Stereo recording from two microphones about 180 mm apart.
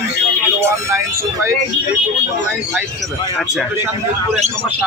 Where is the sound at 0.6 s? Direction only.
15° right (ahead or behind).